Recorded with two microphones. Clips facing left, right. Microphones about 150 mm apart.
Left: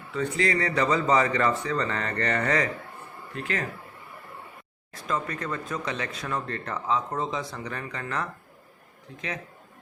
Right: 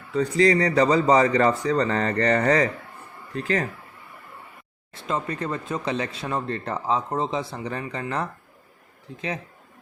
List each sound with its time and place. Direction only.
0.1 s speech: 35° right (ahead or behind)
4.9 s speech: 30° right (ahead or behind)
9.1 s speech: 30° right (ahead or behind)